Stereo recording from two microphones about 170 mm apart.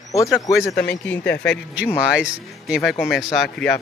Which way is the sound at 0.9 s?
10° left (ahead or behind).